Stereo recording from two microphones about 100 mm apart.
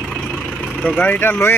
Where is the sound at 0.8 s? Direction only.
10° left (ahead or behind).